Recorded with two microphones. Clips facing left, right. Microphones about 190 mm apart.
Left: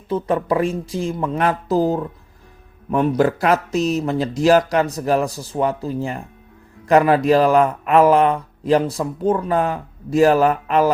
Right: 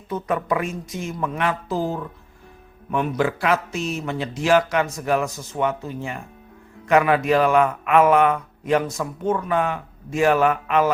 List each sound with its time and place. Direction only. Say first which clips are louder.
0.1 s speech: left 4 dB; 30° left (ahead or behind)